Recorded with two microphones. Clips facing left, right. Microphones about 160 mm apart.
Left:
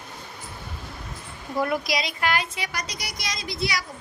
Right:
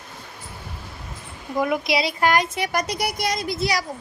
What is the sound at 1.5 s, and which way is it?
Speech, 15° right (ahead or behind).